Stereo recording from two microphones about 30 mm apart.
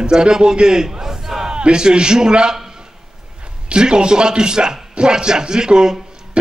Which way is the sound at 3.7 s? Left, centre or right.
Right.